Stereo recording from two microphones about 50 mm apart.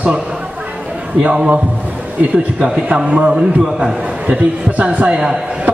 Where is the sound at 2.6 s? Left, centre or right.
Right.